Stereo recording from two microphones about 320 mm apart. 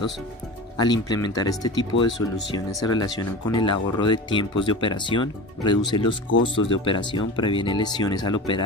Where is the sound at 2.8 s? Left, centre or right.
Centre.